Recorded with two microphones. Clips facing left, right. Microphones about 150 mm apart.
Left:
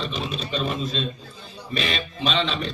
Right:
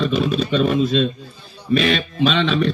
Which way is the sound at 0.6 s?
65° right (ahead or behind).